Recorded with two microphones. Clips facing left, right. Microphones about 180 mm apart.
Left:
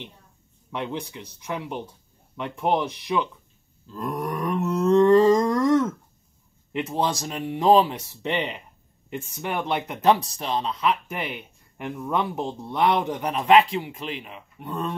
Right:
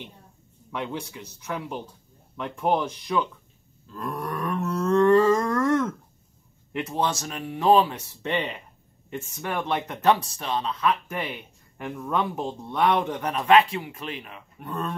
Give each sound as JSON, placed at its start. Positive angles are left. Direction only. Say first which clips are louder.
{"t": 0.7, "sound": "a man's voice", "louder": "left 1 dB", "side_deg": 15}
{"t": 4.0, "sound": "a sound", "louder": "left 3 dB", "side_deg": 15}
{"t": 6.7, "sound": "speech", "louder": "left 1 dB", "side_deg": 15}